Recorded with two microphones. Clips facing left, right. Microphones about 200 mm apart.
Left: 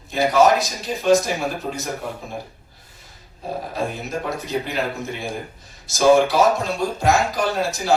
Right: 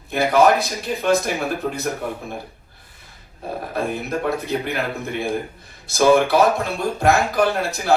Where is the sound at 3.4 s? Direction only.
55° right (ahead or behind).